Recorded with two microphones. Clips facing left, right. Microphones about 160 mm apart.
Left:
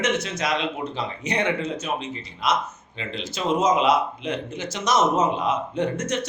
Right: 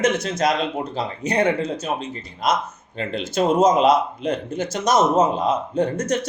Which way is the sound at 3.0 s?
50° right (ahead or behind).